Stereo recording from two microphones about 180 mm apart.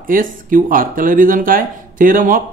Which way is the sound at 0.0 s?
50° right (ahead or behind).